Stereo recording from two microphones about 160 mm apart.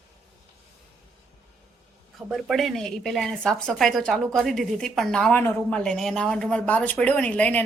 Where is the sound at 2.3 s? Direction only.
Centre (ahead or behind).